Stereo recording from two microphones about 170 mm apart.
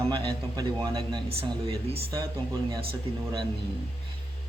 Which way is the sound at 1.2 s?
35° right (ahead or behind).